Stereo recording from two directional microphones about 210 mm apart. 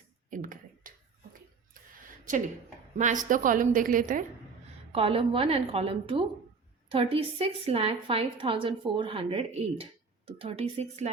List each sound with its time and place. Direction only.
0.3 s a sound: 40° right (ahead or behind)
3.2 s a woman's voice: 40° right (ahead or behind)
4.9 s a woman's voice: 25° right (ahead or behind)